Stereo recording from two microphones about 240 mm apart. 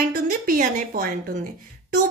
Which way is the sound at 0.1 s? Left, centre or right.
Right.